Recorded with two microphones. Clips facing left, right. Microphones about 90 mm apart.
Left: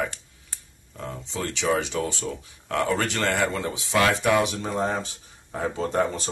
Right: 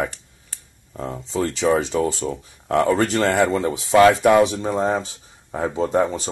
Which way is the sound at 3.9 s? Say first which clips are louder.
Right 8 dB; 35° right (ahead or behind).